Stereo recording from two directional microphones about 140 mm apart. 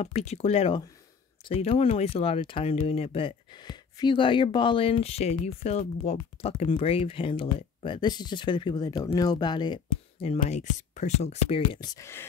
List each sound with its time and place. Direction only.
0.0 s speech: 50° left (ahead or behind); by 9.8 s 30° left (ahead or behind)
10.4 s speech: 60° left (ahead or behind)
11.8 s speech: 25° left (ahead or behind)